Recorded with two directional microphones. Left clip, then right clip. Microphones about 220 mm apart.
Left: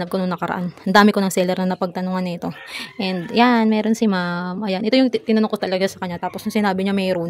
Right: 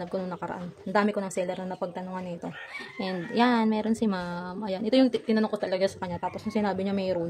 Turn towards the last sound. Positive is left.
turn(degrees=30)  # may be behind; listen again after turning